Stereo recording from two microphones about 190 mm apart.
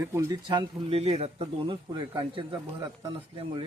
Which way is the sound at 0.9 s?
30° right (ahead or behind).